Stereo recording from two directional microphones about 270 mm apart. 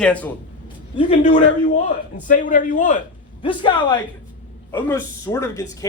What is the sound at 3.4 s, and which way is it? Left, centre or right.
A man's voice, centre.